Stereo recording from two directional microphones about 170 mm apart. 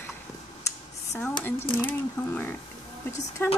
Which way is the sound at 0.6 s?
15° left (ahead or behind).